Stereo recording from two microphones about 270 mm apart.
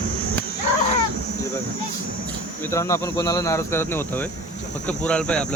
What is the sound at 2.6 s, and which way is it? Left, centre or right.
Speech, centre.